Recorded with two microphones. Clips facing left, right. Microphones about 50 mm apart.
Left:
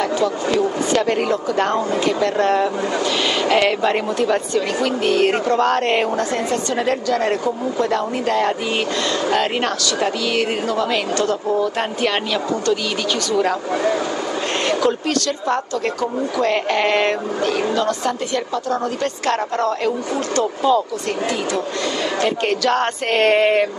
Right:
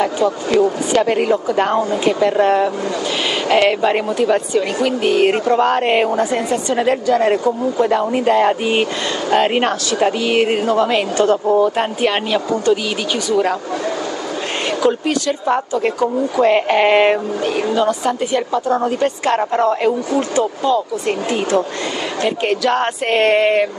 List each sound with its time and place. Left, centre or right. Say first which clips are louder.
0.0 s a woman's voice: right 2 dB; centre
14.7 s a woman's voice: right 3 dB; centre
22.2 s speech: right 3 dB; centre